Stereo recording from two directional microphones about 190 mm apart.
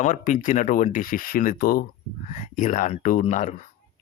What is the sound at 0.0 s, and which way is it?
Speech, 40° left (ahead or behind).